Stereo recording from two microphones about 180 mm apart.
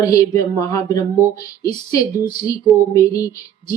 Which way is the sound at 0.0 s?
20° left (ahead or behind).